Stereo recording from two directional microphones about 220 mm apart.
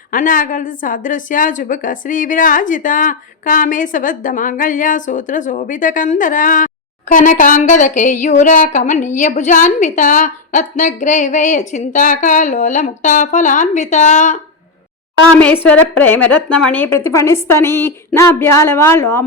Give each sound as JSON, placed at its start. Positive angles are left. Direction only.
{"t": 0.1, "sound": "a woman's voice", "side_deg": 40}
{"t": 15.6, "sound": "a woman's voice", "side_deg": 10}